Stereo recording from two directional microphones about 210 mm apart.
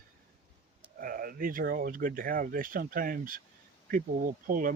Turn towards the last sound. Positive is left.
turn(degrees=-40)  # may be behind; listen again after turning